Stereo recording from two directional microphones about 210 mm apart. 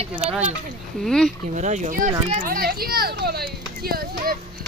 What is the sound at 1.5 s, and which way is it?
Speech, 35° right (ahead or behind).